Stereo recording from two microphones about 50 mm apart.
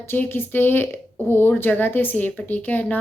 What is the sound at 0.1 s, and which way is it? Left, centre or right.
Speech, left.